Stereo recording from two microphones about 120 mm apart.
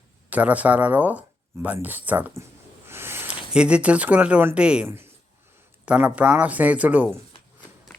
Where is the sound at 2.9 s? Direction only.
20° right (ahead or behind).